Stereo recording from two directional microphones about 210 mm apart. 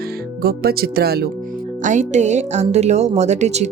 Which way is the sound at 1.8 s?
35° right (ahead or behind).